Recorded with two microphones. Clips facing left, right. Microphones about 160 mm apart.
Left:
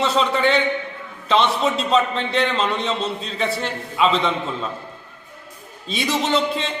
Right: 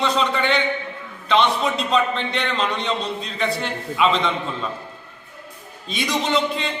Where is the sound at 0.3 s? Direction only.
35° left (ahead or behind).